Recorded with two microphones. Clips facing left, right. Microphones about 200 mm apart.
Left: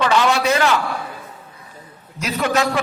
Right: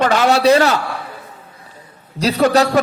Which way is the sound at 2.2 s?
35° right (ahead or behind).